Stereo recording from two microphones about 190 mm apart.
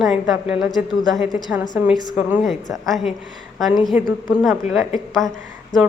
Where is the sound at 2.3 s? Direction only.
Centre (ahead or behind).